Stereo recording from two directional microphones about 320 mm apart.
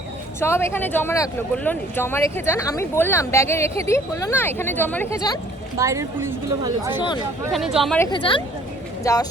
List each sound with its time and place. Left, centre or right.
0.3 s speech: centre
5.7 s speech: centre
6.9 s speech: centre
7.5 s speech: centre
8.1 s speech: centre